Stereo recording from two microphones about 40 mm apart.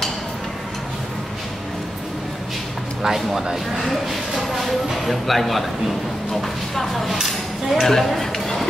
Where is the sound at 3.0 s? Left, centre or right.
Centre.